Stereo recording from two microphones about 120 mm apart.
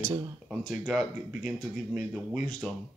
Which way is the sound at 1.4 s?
15° right (ahead or behind).